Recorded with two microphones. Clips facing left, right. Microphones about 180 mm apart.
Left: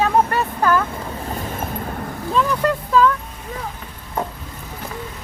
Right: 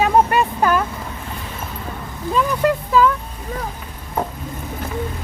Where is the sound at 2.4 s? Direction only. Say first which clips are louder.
Right 1 dB; 10° right (ahead or behind).